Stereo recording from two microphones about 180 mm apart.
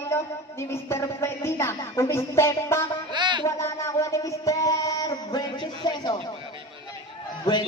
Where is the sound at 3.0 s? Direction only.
25° right (ahead or behind).